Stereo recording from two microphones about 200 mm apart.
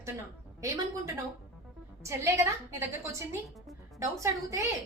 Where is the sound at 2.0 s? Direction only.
15° right (ahead or behind).